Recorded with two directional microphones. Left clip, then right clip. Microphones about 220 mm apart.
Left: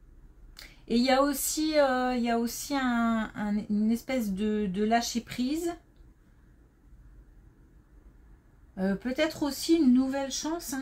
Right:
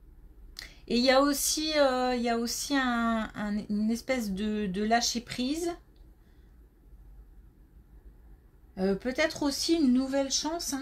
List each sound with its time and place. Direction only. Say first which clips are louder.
0.6 s speech: even; 30° right (ahead or behind)
8.7 s speech: right 1 dB; 25° right (ahead or behind)